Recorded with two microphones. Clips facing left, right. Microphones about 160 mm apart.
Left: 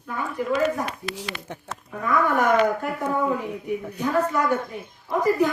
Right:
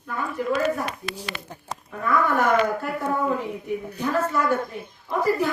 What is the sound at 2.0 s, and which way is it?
Speech, 20° left (ahead or behind).